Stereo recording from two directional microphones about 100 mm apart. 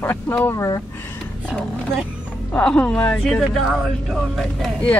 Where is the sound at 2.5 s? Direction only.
10° left (ahead or behind).